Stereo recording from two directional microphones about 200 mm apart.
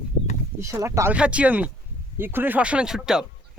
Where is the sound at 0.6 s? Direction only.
15° right (ahead or behind).